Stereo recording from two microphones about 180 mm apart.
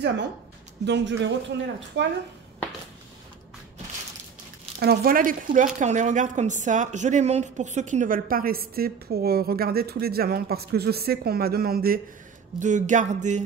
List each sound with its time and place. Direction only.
0.8 s speech: 75° right (ahead or behind)
4.7 s a woman's voice: 55° right (ahead or behind)
12.5 s speech: 45° right (ahead or behind)